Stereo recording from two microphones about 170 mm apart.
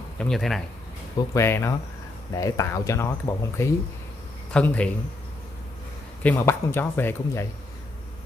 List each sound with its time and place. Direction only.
0.2 s speech: centre (ahead or behind)
1.1 s speech: 15° left (ahead or behind)
4.6 s speech: 5° left (ahead or behind)
6.2 s speech: 15° left (ahead or behind)